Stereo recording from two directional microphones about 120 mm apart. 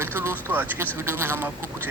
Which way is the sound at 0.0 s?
20° right (ahead or behind).